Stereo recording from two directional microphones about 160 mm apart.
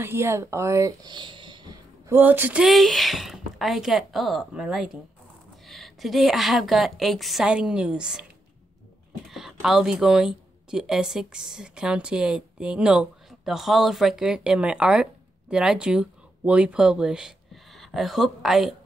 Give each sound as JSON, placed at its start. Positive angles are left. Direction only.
{"t": 0.0, "sound": "speech", "side_deg": -15}
{"t": 2.0, "sound": "speech", "side_deg": -10}
{"t": 9.3, "sound": "speech", "side_deg": 0}